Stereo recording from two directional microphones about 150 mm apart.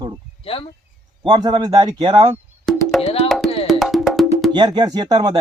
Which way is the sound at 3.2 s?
Centre (ahead or behind).